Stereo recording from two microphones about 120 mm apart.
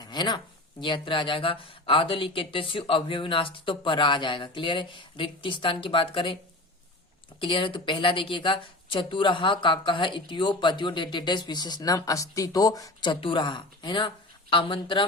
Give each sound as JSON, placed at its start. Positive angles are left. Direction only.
{"t": 0.0, "sound": "a sound", "side_deg": 35}
{"t": 0.8, "sound": "speech", "side_deg": 45}
{"t": 7.3, "sound": "speech", "side_deg": 45}